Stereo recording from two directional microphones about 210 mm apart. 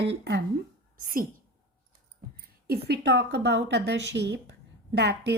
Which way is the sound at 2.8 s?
50° right (ahead or behind).